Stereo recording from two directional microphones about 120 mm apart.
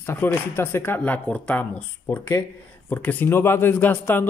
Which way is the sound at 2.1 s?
25° left (ahead or behind).